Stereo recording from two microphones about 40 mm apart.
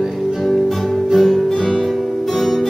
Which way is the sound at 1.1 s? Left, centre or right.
Centre.